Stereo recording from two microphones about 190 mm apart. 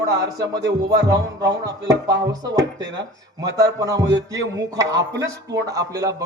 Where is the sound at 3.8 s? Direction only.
15° right (ahead or behind).